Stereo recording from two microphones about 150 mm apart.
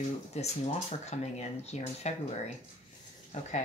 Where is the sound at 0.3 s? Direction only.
45° left (ahead or behind).